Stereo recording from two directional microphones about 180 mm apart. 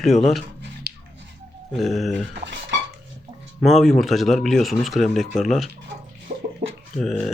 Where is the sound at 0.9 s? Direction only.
60° right (ahead or behind).